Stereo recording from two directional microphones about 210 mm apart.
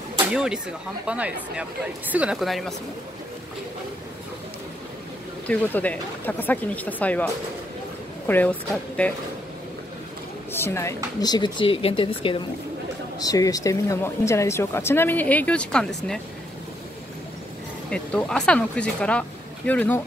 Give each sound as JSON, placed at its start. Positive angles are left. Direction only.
{"t": 0.3, "sound": "speech", "side_deg": -5}
{"t": 5.5, "sound": "speech", "side_deg": 5}
{"t": 8.3, "sound": "speech", "side_deg": 5}
{"t": 10.5, "sound": "speech", "side_deg": 10}
{"t": 17.8, "sound": "speech", "side_deg": 5}